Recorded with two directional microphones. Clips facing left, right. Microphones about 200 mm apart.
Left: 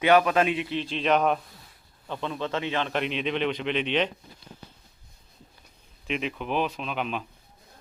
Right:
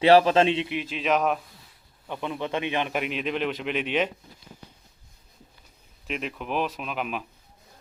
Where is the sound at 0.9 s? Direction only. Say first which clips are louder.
Left 1 dB; centre (ahead or behind).